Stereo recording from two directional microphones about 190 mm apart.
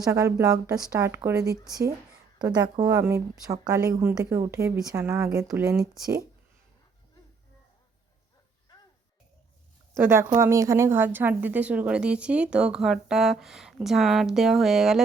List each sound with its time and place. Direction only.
0.0 s speech: 15° right (ahead or behind)
9.9 s a woman's voice: 15° right (ahead or behind)